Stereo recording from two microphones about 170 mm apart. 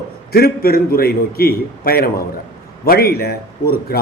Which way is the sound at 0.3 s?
65° left (ahead or behind).